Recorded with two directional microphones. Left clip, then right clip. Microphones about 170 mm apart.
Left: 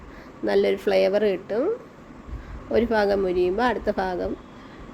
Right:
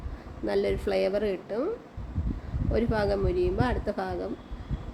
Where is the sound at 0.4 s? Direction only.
20° left (ahead or behind).